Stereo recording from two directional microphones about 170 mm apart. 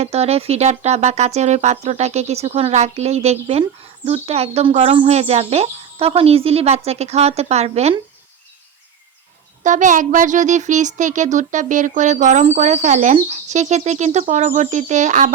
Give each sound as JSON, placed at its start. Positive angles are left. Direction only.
{"t": 0.0, "sound": "speech", "side_deg": -35}
{"t": 9.6, "sound": "speech", "side_deg": -45}